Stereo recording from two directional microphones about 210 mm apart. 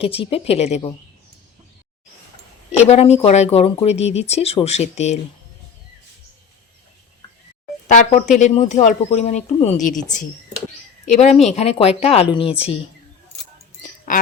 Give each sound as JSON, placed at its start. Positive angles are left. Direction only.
{"t": 0.0, "sound": "a woman's voice", "side_deg": 25}
{"t": 2.7, "sound": "speech", "side_deg": 30}
{"t": 7.9, "sound": "a woman's voice", "side_deg": 35}
{"t": 13.8, "sound": "a sound", "side_deg": 40}